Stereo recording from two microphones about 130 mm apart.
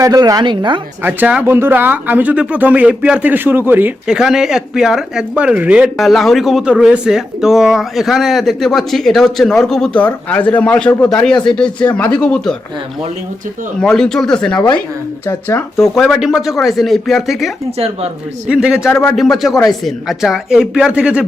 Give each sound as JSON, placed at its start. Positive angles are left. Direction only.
{"t": 0.0, "sound": "a woman's voice", "side_deg": -25}
{"t": 1.0, "sound": "speech", "side_deg": -15}
{"t": 13.7, "sound": "speech", "side_deg": 5}
{"t": 15.8, "sound": "speech", "side_deg": 0}
{"t": 17.7, "sound": "speech", "side_deg": -50}
{"t": 18.4, "sound": "speech", "side_deg": -5}
{"t": 18.8, "sound": "a man's voice", "side_deg": 20}
{"t": 19.1, "sound": "speech", "side_deg": 0}